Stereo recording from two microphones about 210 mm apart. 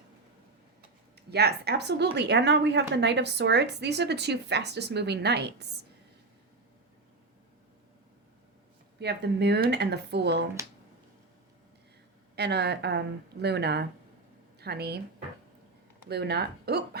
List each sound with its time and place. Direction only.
1.3 s a woman's voice: 50° right (ahead or behind)
9.0 s a woman's voice: 55° right (ahead or behind)
12.4 s a woman's voice: 50° right (ahead or behind)
16.0 s a woman's voice: 50° right (ahead or behind)